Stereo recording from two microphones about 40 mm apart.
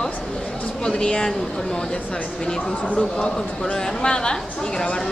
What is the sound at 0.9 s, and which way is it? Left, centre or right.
Speech, left.